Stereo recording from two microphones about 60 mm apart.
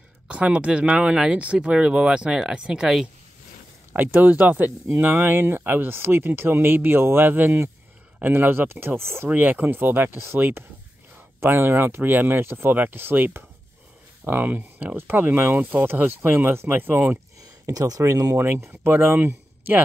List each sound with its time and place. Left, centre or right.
0.3 s speech: right
3.9 s speech: right
9.3 s speech: right
17.7 s speech: right
18.7 s speech: right